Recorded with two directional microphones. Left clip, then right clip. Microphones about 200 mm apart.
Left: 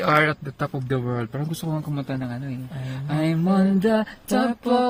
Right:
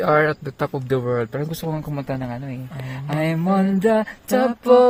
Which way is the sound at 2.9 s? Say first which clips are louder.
Right 2 dB; 30° right (ahead or behind).